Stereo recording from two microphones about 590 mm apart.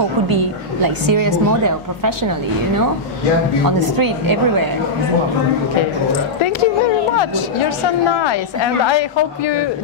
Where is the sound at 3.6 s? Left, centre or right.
Right.